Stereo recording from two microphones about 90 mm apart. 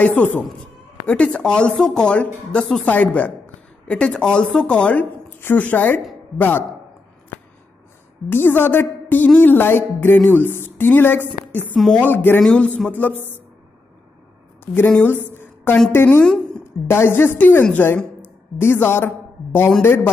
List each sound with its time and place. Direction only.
0.0 s a woman's voice: 20° left (ahead or behind)
1.0 s a woman's voice: 10° left (ahead or behind)
8.3 s a woman's voice: 25° left (ahead or behind)
12.4 s a woman's voice: 10° left (ahead or behind)
14.6 s a woman's voice: 25° left (ahead or behind)